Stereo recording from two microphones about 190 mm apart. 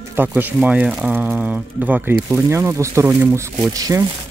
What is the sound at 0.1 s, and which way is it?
Speech, 10° right (ahead or behind).